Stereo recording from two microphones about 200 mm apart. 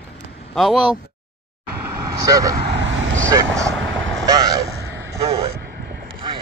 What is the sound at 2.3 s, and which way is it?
Speech, 20° right (ahead or behind).